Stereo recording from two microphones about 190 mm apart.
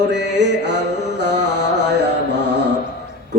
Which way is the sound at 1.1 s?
65° right (ahead or behind).